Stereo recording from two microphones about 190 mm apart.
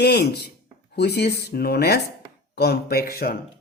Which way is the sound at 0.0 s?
60° left (ahead or behind).